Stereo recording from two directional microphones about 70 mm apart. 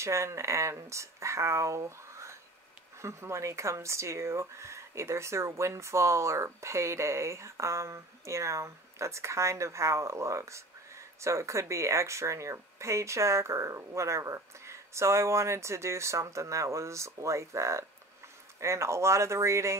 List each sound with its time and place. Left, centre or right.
0.0 s speech: right